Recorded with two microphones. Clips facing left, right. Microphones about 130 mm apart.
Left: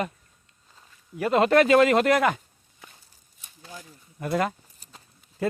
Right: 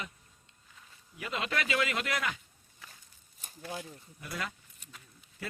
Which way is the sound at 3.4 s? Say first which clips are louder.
Right 3 dB; 40° right (ahead or behind).